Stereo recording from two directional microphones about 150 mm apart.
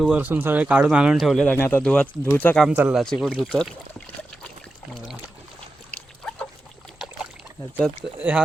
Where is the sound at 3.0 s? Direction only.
Centre (ahead or behind).